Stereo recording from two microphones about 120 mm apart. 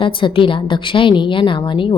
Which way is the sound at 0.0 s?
45° left (ahead or behind).